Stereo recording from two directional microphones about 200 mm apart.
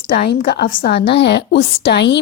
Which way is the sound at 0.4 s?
55° left (ahead or behind).